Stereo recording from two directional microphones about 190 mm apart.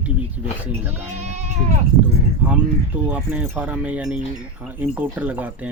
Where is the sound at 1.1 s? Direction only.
35° right (ahead or behind).